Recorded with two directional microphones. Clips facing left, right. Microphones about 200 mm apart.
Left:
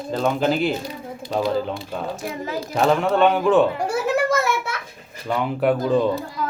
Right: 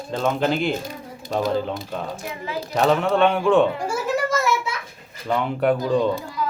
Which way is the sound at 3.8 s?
65° left (ahead or behind).